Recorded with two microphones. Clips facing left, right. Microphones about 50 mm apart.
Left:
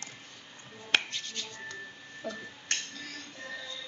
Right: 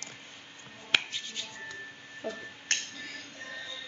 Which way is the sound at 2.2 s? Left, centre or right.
Right.